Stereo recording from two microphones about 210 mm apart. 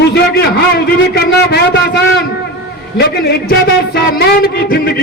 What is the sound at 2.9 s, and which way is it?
A man's voice, 50° left (ahead or behind).